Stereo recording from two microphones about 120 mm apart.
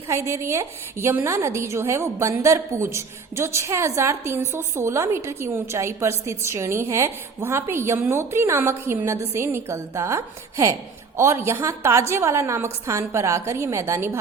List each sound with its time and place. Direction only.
0.1 s a woman's voice: 20° right (ahead or behind)